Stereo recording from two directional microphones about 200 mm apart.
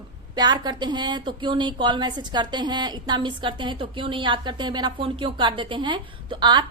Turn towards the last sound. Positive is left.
turn(degrees=-20)  # may be behind; listen again after turning